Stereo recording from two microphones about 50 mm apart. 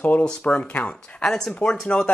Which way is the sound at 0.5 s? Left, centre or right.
Left.